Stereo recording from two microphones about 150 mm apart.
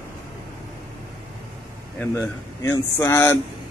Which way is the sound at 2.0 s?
15° left (ahead or behind).